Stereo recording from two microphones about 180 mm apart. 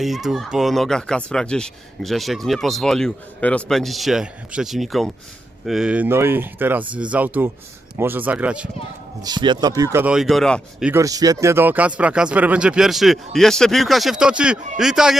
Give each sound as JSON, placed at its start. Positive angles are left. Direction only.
{"t": 0.0, "sound": "speech", "side_deg": 0}
{"t": 9.2, "sound": "speech", "side_deg": -25}
{"t": 10.0, "sound": "speech", "side_deg": -5}
{"t": 10.9, "sound": "speech", "side_deg": -20}